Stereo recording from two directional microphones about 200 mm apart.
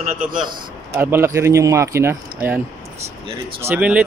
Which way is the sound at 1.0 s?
10° right (ahead or behind).